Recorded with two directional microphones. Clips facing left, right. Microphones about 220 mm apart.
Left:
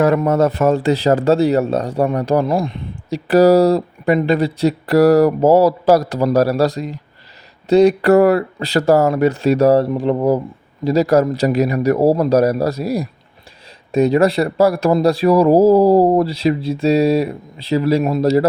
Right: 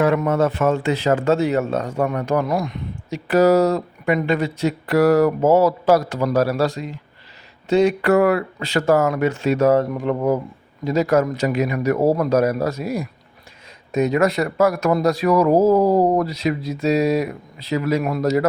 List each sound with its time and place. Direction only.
0.0 s speech: 40° left (ahead or behind)